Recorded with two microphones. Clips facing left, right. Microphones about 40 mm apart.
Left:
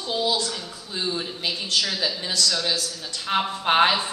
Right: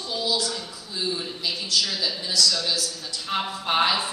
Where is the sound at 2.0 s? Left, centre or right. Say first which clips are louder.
Even; left.